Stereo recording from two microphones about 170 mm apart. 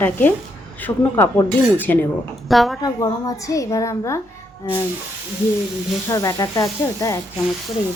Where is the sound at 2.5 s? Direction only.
Centre (ahead or behind).